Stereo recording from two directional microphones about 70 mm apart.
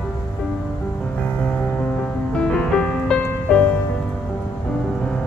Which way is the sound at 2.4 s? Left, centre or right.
Centre.